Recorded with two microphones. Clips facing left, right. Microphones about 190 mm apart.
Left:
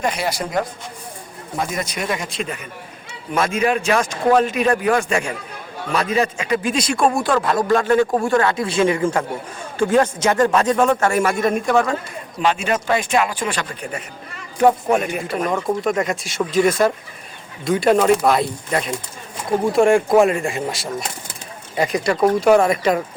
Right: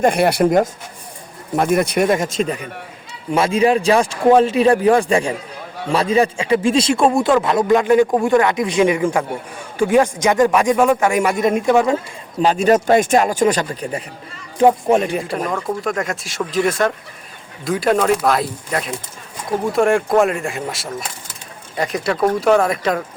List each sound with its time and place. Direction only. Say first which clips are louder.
0.0 s a man's voice: right 8 dB; 55° right (ahead or behind); by 11.9 s 20° right (ahead or behind)
12.4 s speech: right 6 dB; 35° right (ahead or behind)
14.6 s a man's voice: right 2 dB; 30° right (ahead or behind)
15.4 s speech: left 2 dB; centre (ahead or behind)